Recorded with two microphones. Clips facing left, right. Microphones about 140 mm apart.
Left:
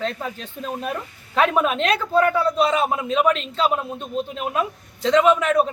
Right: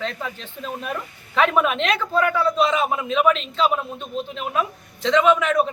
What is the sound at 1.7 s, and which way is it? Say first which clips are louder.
A man's voice: left 2 dB; 40° left (ahead or behind).